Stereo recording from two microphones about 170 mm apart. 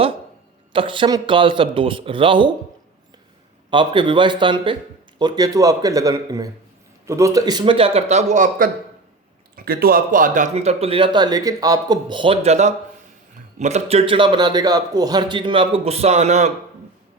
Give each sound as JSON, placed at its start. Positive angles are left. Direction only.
{"t": 0.7, "sound": "speech", "side_deg": -30}
{"t": 3.7, "sound": "speech", "side_deg": -30}